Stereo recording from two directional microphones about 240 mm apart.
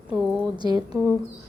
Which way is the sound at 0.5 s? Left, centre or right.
Centre.